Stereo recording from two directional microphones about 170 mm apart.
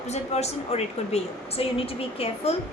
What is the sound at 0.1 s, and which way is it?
A woman's voice, 40° left (ahead or behind).